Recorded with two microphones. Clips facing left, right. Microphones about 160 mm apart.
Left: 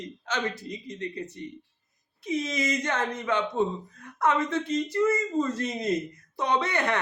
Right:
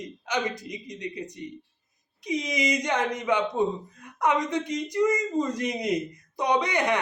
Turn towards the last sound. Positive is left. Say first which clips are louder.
# right 2 dB
turn(degrees=-15)  # may be behind; listen again after turning